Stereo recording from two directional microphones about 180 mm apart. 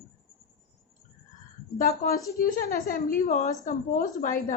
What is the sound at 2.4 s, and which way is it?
A woman's voice, 50° left (ahead or behind).